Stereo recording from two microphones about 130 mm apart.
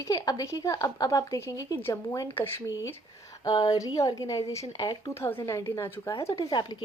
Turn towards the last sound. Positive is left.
turn(degrees=30)  # may be behind; listen again after turning